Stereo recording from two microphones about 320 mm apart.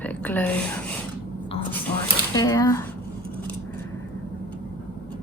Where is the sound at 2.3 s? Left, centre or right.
Centre.